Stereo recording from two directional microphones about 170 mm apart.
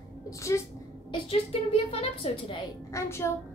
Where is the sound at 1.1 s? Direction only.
35° left (ahead or behind).